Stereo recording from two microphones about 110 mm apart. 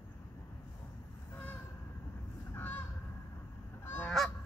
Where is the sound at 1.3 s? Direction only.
15° left (ahead or behind).